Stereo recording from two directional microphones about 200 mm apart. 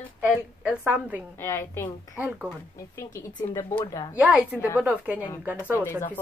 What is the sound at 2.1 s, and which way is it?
Speech, 5° right (ahead or behind).